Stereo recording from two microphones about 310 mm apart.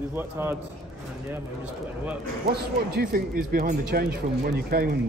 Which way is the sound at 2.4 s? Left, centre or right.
Right.